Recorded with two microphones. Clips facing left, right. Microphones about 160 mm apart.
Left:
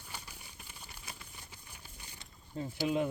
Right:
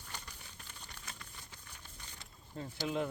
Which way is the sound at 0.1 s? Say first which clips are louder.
Left 1 dB; 10° left (ahead or behind).